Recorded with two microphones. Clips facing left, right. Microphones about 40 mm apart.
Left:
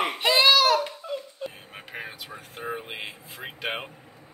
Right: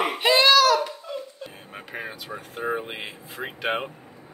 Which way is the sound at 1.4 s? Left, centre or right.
Centre.